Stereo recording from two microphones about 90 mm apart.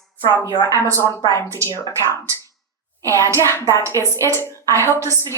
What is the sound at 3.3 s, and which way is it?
A woman's voice, 30° left (ahead or behind).